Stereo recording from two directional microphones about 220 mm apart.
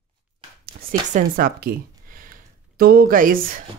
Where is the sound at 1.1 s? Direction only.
40° right (ahead or behind).